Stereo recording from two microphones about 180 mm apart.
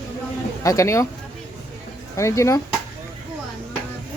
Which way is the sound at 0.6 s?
15° left (ahead or behind).